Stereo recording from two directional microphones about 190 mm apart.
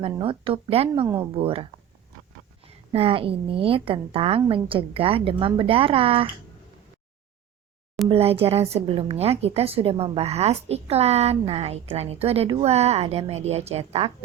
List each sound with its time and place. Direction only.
0.2 s a woman's voice: 30° right (ahead or behind)
2.6 s a woman's voice: 30° right (ahead or behind)
8.1 s a woman's voice: 30° right (ahead or behind)